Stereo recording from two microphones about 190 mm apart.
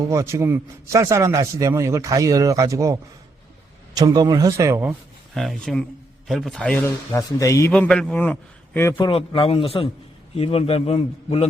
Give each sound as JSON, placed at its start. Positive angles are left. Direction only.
{"t": 0.1, "sound": "a man's voice", "side_deg": -15}
{"t": 7.7, "sound": "a man's voice", "side_deg": 5}
{"t": 9.0, "sound": "a man's voice", "side_deg": 25}